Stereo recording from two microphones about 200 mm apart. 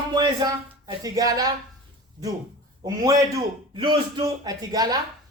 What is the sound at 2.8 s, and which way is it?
A man's voice, 15° right (ahead or behind).